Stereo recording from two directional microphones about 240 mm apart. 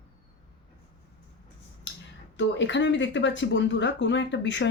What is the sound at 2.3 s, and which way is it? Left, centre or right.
Speech, left.